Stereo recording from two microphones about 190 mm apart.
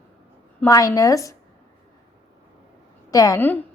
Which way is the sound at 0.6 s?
20° left (ahead or behind).